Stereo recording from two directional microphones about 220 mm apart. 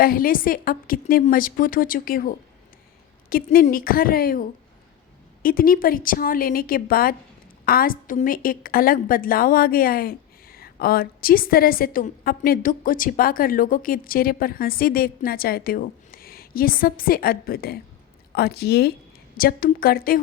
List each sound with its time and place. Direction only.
0.0 s a woman's voice: 40° left (ahead or behind)